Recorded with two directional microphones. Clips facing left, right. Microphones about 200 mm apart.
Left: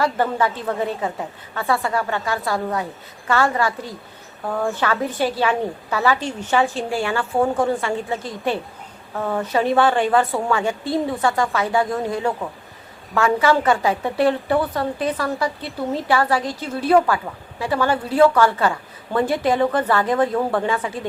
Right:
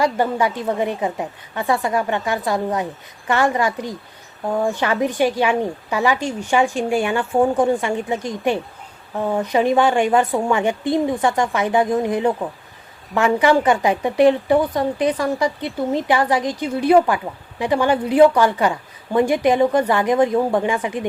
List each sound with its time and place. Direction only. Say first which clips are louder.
0.0 s speech: right 2 dB; 15° right (ahead or behind)